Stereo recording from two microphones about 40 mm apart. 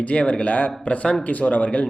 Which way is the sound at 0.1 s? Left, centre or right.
Left.